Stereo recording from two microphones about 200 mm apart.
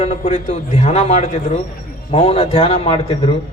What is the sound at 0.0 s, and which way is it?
A man's voice, 35° left (ahead or behind).